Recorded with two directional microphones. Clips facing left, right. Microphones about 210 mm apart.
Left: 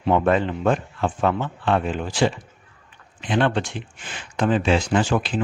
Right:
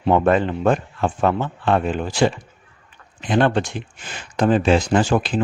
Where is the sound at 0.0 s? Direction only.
45° right (ahead or behind).